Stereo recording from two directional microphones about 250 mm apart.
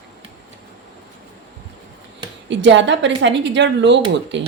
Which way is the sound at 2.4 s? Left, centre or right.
Right.